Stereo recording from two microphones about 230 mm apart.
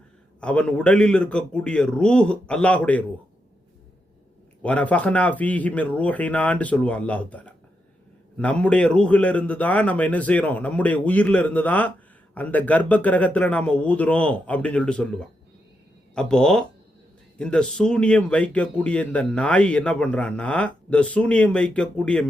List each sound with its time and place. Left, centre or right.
0.3 s speech: centre
4.6 s a man's voice: centre